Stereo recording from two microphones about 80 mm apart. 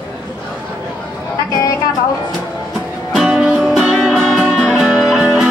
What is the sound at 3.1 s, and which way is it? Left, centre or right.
Music, centre.